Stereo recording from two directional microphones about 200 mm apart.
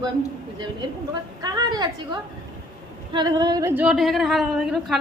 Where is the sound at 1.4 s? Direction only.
20° right (ahead or behind).